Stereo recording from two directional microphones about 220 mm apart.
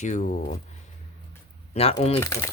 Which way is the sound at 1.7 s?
25° left (ahead or behind).